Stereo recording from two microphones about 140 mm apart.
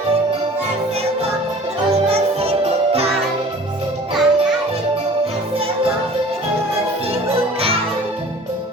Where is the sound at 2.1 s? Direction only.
45° right (ahead or behind).